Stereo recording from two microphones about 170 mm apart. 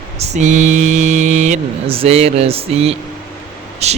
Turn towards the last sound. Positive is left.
turn(degrees=-40)  # may be behind; listen again after turning